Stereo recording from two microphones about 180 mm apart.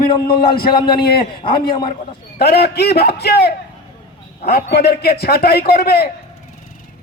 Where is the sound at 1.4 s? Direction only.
30° left (ahead or behind).